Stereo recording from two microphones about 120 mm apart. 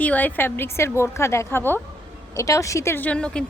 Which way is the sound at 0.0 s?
15° left (ahead or behind).